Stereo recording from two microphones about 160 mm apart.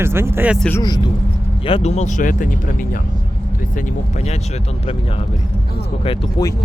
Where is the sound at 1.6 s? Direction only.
40° left (ahead or behind); by 2.5 s 55° left (ahead or behind).